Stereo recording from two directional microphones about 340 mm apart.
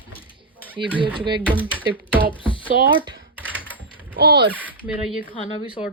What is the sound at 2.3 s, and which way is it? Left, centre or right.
Speech, centre.